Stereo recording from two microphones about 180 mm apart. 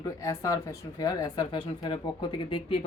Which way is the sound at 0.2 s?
20° left (ahead or behind).